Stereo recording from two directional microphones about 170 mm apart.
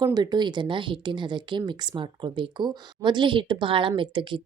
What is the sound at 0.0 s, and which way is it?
Speech, 25° right (ahead or behind).